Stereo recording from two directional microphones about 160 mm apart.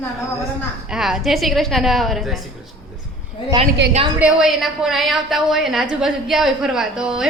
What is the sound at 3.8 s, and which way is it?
Speech, 90° right.